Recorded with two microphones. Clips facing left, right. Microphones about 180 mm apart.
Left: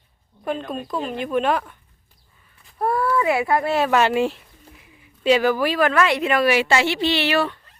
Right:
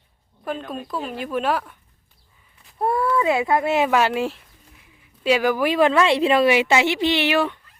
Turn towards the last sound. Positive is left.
turn(degrees=-15)  # may be behind; listen again after turning